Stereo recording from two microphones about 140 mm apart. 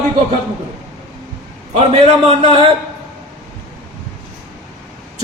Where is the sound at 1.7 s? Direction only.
50° right (ahead or behind).